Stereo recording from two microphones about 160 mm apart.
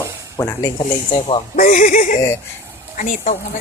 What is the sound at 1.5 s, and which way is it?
Speech, 55° left (ahead or behind).